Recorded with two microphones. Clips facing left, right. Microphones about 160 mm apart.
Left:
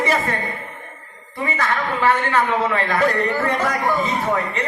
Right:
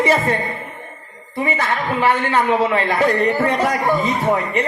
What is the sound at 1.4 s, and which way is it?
A man's voice, 15° right (ahead or behind).